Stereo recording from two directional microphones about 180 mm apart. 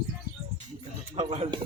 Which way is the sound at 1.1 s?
35° right (ahead or behind).